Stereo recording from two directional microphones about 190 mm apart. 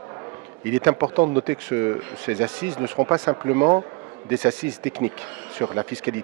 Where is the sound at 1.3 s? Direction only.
15° right (ahead or behind).